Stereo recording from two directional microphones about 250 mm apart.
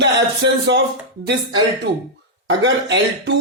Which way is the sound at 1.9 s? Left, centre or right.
Right.